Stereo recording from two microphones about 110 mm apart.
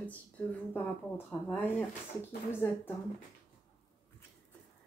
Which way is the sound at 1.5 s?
10° left (ahead or behind).